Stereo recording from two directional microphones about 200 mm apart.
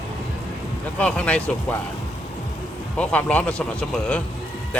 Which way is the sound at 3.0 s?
5° left (ahead or behind).